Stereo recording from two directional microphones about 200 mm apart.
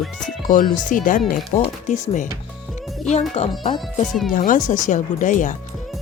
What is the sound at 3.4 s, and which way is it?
Speech, 30° left (ahead or behind).